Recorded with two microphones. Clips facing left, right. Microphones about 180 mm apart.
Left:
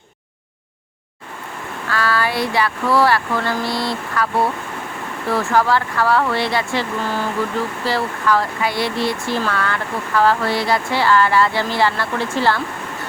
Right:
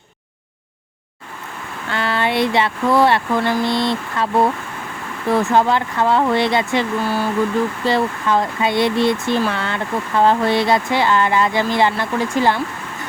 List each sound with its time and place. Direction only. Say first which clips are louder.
1.9 s speech: right 1 dB; 25° right (ahead or behind)
7.9 s speech: left 1 dB; 20° right (ahead or behind)